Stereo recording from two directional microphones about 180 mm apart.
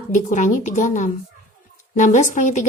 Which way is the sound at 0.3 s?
45° left (ahead or behind).